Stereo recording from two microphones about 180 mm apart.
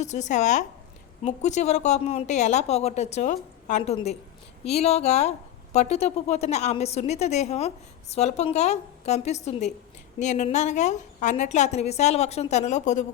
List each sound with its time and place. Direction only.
0.0 s a woman's voice: 40° left (ahead or behind)